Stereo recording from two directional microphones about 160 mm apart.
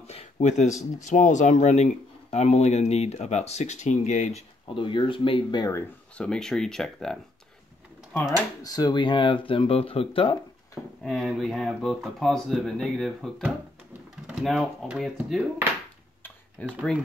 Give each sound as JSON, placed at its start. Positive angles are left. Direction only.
{"t": 0.0, "sound": "a sound", "side_deg": 40}
{"t": 1.0, "sound": "speech", "side_deg": 50}
{"t": 6.1, "sound": "speech", "side_deg": 5}
{"t": 8.6, "sound": "speech", "side_deg": 25}
{"t": 11.0, "sound": "speech", "side_deg": 0}
{"t": 16.6, "sound": "speech", "side_deg": 10}